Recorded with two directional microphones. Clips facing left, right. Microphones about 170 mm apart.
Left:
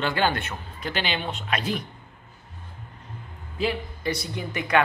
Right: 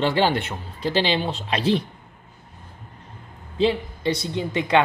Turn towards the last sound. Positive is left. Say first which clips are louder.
# right 3 dB
turn(degrees=-25)  # may be behind; listen again after turning